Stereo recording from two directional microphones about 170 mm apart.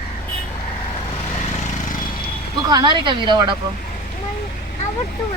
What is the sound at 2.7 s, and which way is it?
Speech, 25° right (ahead or behind).